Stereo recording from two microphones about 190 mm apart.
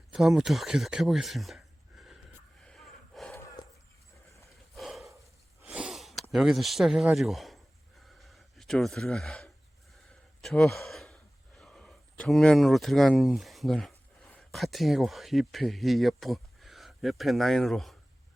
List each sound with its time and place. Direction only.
0.1 s speech: centre (ahead or behind)
2.6 s snort: centre (ahead or behind)
3.3 s dog: 20° left (ahead or behind)
4.4 s a sound: centre (ahead or behind)
5.6 s sniff: 5° right (ahead or behind)
6.3 s a sound: centre (ahead or behind)
10.4 s speech: centre (ahead or behind)